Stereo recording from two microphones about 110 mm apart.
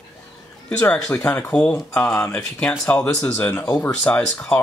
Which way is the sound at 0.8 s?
10° left (ahead or behind).